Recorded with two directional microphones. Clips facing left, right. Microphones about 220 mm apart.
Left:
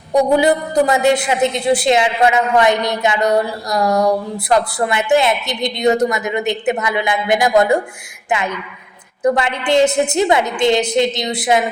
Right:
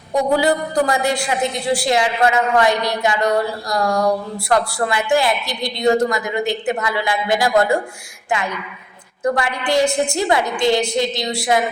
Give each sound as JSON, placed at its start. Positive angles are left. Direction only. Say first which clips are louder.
{"t": 0.3, "sound": "a woman's voice", "louder": "left 3 dB", "side_deg": 20}